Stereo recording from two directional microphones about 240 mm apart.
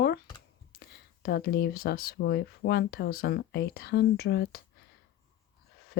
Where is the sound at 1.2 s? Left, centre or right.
Left.